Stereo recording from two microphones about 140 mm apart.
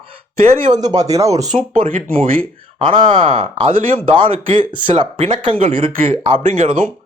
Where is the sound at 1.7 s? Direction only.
65° right (ahead or behind).